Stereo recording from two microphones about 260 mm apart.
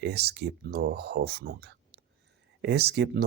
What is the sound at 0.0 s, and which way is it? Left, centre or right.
Speech, right.